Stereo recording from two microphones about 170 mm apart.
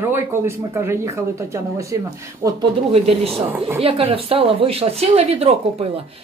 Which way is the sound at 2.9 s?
35° right (ahead or behind).